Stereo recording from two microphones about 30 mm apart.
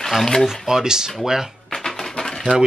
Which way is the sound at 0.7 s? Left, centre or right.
Centre.